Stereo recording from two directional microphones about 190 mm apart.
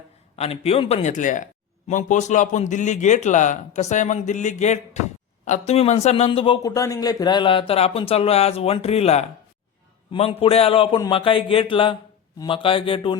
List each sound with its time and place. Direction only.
0.3 s a man's voice: 30° left (ahead or behind)